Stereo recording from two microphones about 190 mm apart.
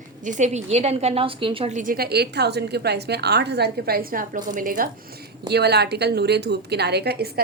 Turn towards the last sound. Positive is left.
turn(degrees=-60)  # may be behind; listen again after turning